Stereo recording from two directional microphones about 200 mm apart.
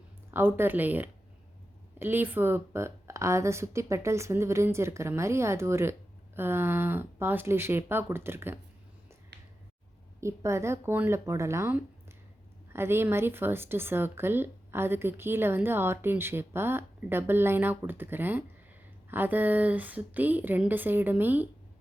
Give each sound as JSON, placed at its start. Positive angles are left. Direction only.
{"t": 0.3, "sound": "a woman's voice", "side_deg": -10}
{"t": 9.3, "sound": "a sound", "side_deg": -60}
{"t": 10.2, "sound": "a woman's voice", "side_deg": -15}